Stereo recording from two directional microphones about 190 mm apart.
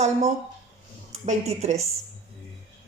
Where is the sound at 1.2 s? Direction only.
35° right (ahead or behind).